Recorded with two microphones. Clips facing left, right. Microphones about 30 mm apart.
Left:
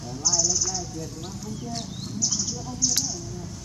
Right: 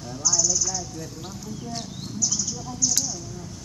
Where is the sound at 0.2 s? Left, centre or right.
Centre.